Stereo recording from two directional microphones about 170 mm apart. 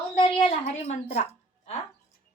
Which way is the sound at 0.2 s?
40° left (ahead or behind).